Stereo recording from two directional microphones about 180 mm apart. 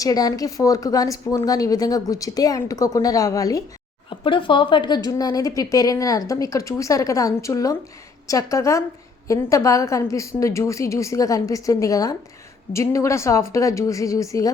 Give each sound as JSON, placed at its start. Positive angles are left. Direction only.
{"t": 0.0, "sound": "a woman's voice", "side_deg": 20}